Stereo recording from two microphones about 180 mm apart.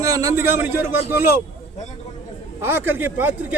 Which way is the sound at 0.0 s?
15° right (ahead or behind).